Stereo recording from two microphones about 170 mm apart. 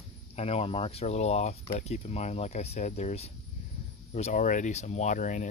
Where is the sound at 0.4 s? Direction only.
35° left (ahead or behind).